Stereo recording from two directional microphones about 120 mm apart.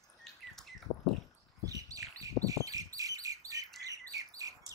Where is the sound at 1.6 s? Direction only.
30° right (ahead or behind).